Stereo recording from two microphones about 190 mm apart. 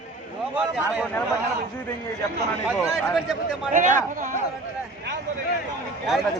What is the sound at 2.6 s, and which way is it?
Speech, centre (ahead or behind).